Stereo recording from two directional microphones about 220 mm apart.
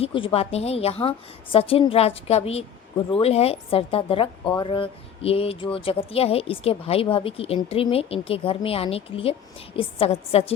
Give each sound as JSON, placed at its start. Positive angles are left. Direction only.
{"t": 0.0, "sound": "a woman's voice", "side_deg": 25}